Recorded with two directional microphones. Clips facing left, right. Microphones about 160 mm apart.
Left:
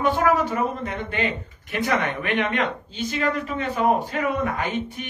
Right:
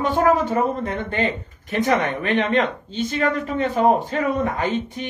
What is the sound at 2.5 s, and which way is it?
Speech, 45° right (ahead or behind).